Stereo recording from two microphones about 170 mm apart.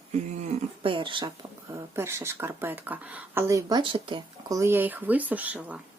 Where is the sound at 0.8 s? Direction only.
30° right (ahead or behind).